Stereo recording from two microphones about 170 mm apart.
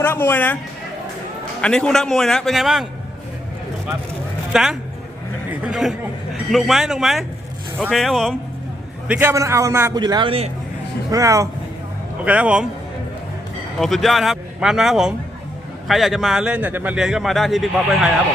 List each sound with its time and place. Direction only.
0.0 s speech: 10° left (ahead or behind)
1.6 s speech: 5° left (ahead or behind)
4.5 s speech: centre (ahead or behind)
9.0 s a man's voice: 10° right (ahead or behind); by 10.5 s 35° right (ahead or behind)
11.1 s a man's voice: 20° right (ahead or behind)
12.2 s a man's voice: 5° right (ahead or behind)
13.7 s speech: centre (ahead or behind)